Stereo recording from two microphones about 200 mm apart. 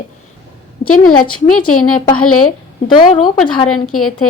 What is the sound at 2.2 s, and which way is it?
Speech, 90° left.